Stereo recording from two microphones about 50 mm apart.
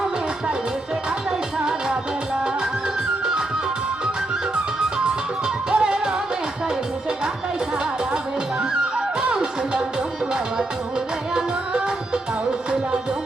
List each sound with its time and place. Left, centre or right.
1.5 s music: centre
4.5 s music: centre
9.0 s music: centre
11.3 s music: centre